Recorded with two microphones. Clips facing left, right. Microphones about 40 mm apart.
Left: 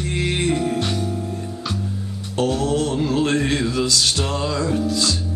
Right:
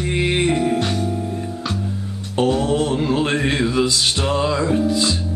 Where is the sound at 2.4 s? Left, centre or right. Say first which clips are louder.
Right 2 dB; right.